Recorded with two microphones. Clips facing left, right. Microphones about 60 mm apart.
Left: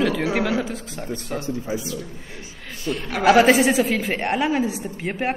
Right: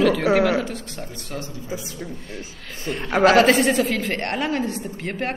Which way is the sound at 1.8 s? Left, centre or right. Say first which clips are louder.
Left 2 dB; right.